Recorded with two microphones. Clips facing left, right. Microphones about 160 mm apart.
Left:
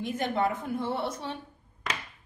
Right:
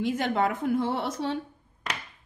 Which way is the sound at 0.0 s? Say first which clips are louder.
Right 3 dB; 90° right.